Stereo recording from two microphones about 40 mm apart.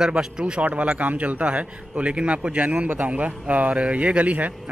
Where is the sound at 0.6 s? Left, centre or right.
Right.